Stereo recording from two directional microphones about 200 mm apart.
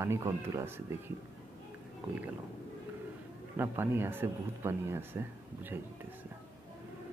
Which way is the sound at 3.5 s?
10° right (ahead or behind).